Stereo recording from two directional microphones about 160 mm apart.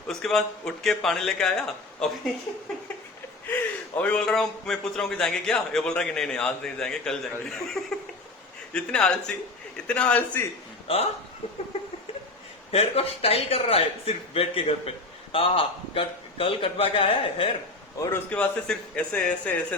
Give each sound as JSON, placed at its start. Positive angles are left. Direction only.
{"t": 0.1, "sound": "a man's voice", "side_deg": 0}
{"t": 10.8, "sound": "a man's voice", "side_deg": 40}
{"t": 12.7, "sound": "a man's voice", "side_deg": 40}
{"t": 18.0, "sound": "a man's voice", "side_deg": 10}